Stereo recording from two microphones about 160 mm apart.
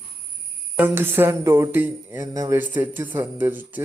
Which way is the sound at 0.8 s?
15° right (ahead or behind).